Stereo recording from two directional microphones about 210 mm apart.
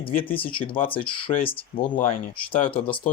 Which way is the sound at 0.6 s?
25° left (ahead or behind).